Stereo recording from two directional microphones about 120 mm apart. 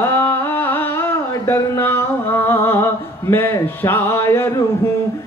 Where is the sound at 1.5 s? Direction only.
20° left (ahead or behind).